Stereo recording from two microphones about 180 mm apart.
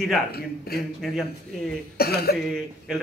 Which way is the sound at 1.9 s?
60° left (ahead or behind).